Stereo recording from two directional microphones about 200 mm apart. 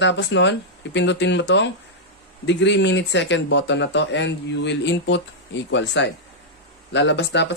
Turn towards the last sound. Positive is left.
turn(degrees=60)  # may be behind; listen again after turning